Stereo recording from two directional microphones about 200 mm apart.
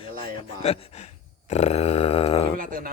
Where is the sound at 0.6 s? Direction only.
30° left (ahead or behind).